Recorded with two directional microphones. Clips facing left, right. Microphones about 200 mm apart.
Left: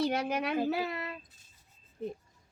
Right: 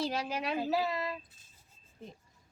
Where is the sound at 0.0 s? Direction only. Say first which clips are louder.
Left 4 dB; 60° left (ahead or behind).